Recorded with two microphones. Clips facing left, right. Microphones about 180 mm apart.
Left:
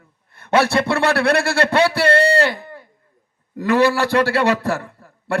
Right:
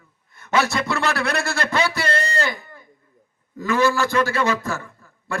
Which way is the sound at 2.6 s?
70° left (ahead or behind).